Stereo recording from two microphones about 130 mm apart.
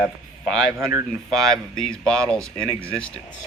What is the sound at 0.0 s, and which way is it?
Speech, centre (ahead or behind).